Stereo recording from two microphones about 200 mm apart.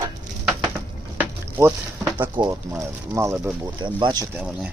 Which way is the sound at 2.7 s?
10° right (ahead or behind).